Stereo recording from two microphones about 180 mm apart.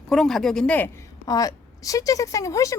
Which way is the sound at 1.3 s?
20° left (ahead or behind).